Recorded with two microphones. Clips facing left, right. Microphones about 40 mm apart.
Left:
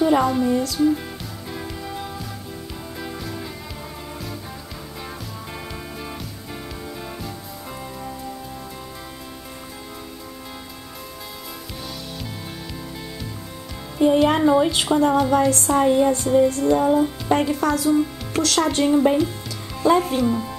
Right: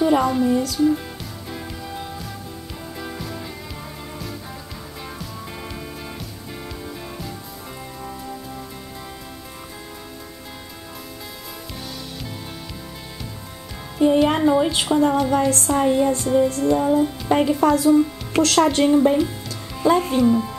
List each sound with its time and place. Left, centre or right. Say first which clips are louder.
0.0 s speech: even; centre
1.9 s music: left 1 dB; centre
13.9 s speech: even; centre
16.6 s music: even; centre
17.3 s speech: right 3 dB; centre
17.6 s speech: right 5 dB; right
18.9 s speech: left 1 dB; centre
19.7 s music: even; centre
20.2 s speech: right 4 dB; centre